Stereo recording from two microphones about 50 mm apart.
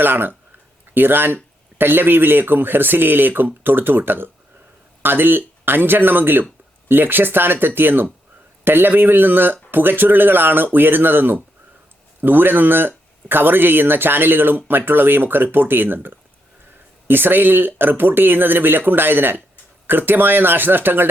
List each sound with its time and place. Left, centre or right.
0.0 s speech: right